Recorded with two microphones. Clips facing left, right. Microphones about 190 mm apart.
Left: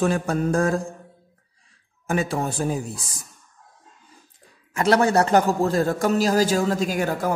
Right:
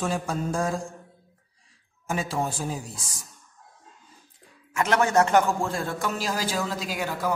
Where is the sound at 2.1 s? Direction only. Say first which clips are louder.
Left 4 dB; 55° left (ahead or behind).